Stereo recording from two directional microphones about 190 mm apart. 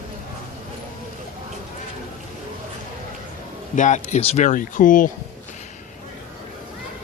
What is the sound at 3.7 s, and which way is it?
A man's voice, 40° left (ahead or behind).